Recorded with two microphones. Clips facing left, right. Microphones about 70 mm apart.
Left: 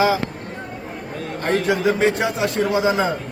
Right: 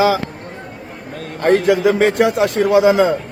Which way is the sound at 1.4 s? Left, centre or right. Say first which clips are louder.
Right 6 dB; right.